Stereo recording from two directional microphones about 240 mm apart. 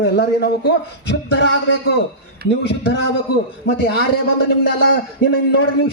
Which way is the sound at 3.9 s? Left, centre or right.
Left.